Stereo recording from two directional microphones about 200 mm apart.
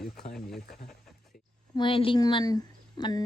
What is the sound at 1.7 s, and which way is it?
A woman's voice, 25° left (ahead or behind).